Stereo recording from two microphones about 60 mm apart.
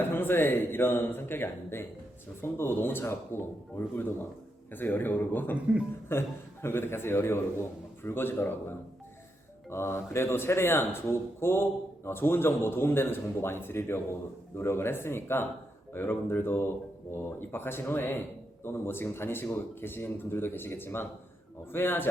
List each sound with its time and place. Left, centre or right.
0.0 s speech: left
5.5 s a man's voice: centre
6.1 s speech: left